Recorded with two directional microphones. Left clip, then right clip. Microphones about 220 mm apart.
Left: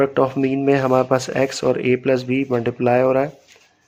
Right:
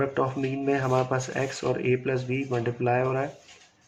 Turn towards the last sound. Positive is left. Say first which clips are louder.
# left 9 dB
turn(degrees=50)  # may be behind; listen again after turning